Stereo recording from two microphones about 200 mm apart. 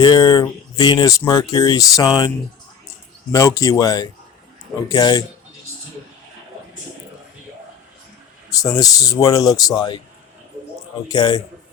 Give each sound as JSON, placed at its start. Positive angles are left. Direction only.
{"t": 0.0, "sound": "speech", "side_deg": 20}
{"t": 3.3, "sound": "speech", "side_deg": 15}
{"t": 8.4, "sound": "speech", "side_deg": 15}
{"t": 11.1, "sound": "speech", "side_deg": 20}